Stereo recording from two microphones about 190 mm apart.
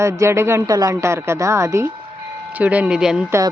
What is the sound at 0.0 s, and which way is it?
A woman's voice, 15° right (ahead or behind).